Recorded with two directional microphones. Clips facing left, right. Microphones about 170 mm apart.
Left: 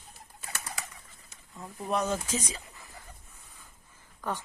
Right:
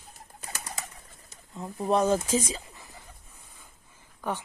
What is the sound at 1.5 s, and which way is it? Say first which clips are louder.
Speech: right 6 dB; 25° right (ahead or behind).